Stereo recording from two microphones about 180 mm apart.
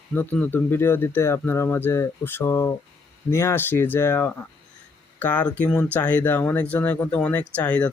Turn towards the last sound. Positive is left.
turn(degrees=10)  # may be behind; listen again after turning